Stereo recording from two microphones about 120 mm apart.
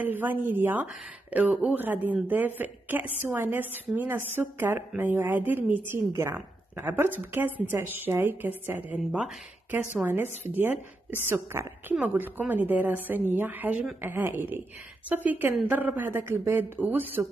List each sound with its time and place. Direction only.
0.0 s a woman's voice: 15° right (ahead or behind)